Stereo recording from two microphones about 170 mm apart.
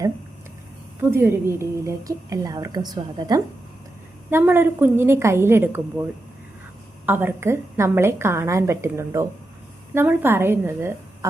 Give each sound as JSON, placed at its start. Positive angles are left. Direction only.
{"t": 1.1, "sound": "a woman's voice", "side_deg": -15}